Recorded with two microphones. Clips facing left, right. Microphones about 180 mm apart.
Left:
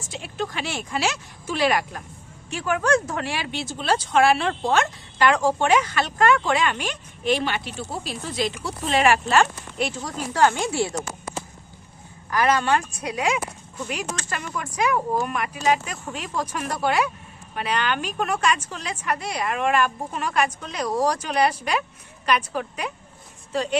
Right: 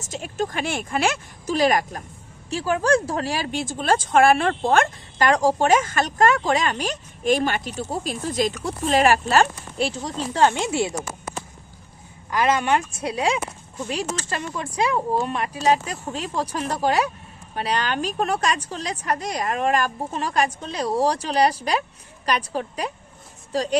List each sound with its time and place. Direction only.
0.0 s speech: 45° right (ahead or behind); by 10.9 s 20° right (ahead or behind)
12.3 s speech: 20° right (ahead or behind)